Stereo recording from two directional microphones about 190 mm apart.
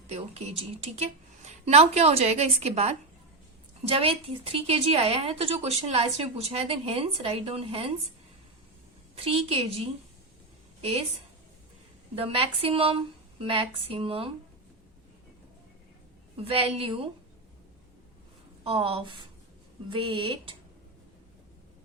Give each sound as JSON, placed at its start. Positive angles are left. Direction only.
{"t": 0.1, "sound": "a woman's voice", "side_deg": -35}
{"t": 9.1, "sound": "a woman's voice", "side_deg": -30}
{"t": 12.1, "sound": "a woman's voice", "side_deg": -30}
{"t": 16.4, "sound": "a woman's voice", "side_deg": -30}
{"t": 18.6, "sound": "a woman's voice", "side_deg": -30}